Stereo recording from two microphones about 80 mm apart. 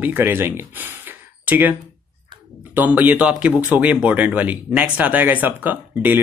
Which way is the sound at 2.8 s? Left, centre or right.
Right.